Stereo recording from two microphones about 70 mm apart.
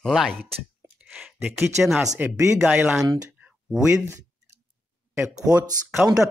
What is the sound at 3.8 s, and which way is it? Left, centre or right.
Speech, right.